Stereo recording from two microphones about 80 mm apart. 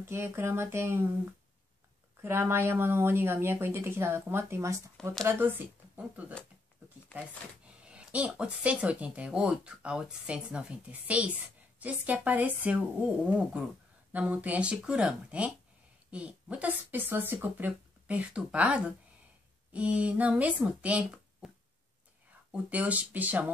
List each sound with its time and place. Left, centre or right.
0.0 s speech: right
2.2 s speech: right
5.4 s speech: right
7.6 s a sound: centre
8.4 s speech: centre
21.4 s a sound: centre
22.5 s speech: centre